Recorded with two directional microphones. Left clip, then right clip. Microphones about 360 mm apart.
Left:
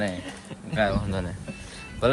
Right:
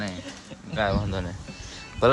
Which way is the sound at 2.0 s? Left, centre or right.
Right.